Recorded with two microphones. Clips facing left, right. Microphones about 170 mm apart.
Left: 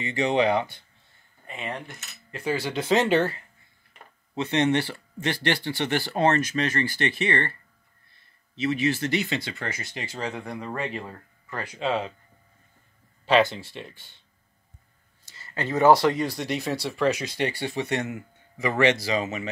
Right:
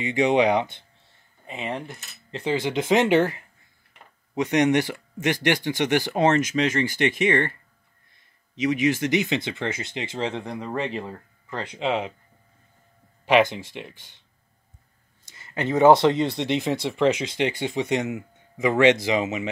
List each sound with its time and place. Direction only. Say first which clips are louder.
0.0 s speech: right 3 dB; 15° right (ahead or behind)
1.5 s speech: right 3 dB; centre (ahead or behind)
2.3 s speech: right 3 dB; 20° right (ahead or behind)
10.4 s speech: right 3 dB; 5° right (ahead or behind)
11.5 s speech: right 1 dB; 20° right (ahead or behind)
13.2 s speech: right 2 dB; 15° right (ahead or behind)
15.3 s speech: right 3 dB; 20° right (ahead or behind)